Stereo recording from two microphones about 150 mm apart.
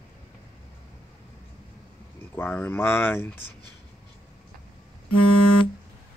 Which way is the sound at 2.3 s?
15° left (ahead or behind).